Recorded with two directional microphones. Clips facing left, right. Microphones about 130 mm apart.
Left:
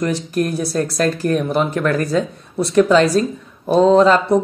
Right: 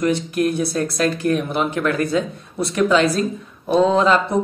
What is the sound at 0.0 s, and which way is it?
A woman's voice, 40° left (ahead or behind).